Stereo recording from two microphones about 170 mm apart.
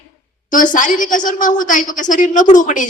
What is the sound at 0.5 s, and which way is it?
A woman's voice, 50° left (ahead or behind).